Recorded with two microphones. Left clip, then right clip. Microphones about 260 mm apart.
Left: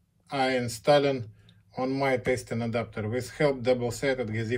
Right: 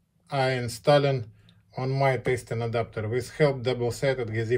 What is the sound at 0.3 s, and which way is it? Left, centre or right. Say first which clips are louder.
Speech: even; right.